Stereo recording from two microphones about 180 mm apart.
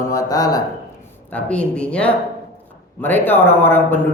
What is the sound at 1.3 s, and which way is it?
A man's voice, 5° left (ahead or behind).